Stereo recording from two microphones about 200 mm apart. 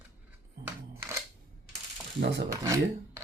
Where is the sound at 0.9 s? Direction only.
15° right (ahead or behind).